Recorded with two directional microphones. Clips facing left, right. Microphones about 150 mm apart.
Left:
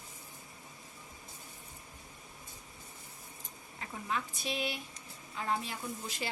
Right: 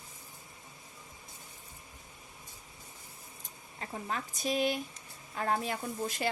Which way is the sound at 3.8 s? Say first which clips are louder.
Even; 40° right (ahead or behind).